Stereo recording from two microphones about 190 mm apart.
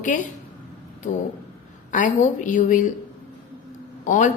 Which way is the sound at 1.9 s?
40° left (ahead or behind).